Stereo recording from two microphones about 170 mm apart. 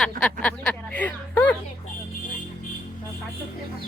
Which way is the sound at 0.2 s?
10° left (ahead or behind).